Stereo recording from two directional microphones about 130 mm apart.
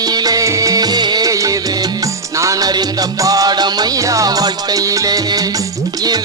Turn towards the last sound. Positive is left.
turn(degrees=-30)  # may be behind; listen again after turning